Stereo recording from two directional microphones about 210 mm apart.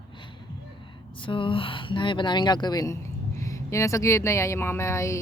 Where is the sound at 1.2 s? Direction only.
25° left (ahead or behind).